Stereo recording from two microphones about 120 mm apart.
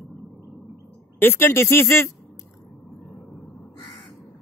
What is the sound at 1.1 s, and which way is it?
Speech, 20° left (ahead or behind).